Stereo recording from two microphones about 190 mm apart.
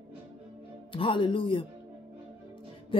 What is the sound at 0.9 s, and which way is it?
Speech, 25° left (ahead or behind).